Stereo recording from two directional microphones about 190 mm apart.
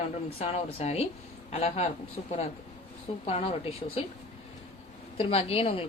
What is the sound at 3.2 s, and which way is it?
Speech, 30° left (ahead or behind).